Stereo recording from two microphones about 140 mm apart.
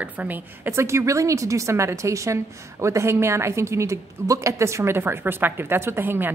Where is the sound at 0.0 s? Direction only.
10° right (ahead or behind).